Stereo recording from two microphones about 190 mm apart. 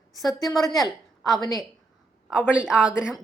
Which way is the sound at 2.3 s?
5° right (ahead or behind).